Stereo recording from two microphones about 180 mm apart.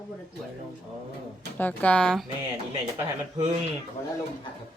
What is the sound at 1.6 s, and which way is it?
Speech, 10° left (ahead or behind).